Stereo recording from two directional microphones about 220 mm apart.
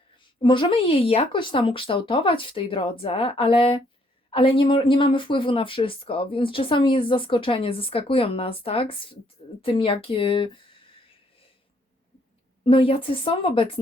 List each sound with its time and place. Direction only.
0.4 s speech: 20° left (ahead or behind)
12.6 s speech: 25° left (ahead or behind)